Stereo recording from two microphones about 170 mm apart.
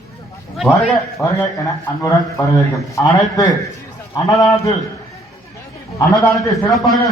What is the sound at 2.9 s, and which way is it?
A man's voice, 20° left (ahead or behind).